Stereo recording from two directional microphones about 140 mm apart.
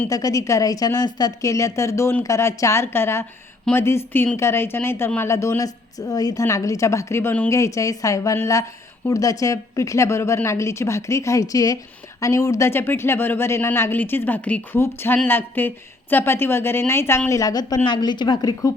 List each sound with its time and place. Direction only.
0.1 s a woman's voice: 25° left (ahead or behind)